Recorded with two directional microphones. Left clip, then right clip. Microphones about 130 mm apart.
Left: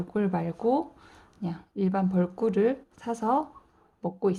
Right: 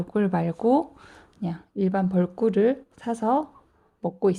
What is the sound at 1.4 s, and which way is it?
Speech, 35° right (ahead or behind).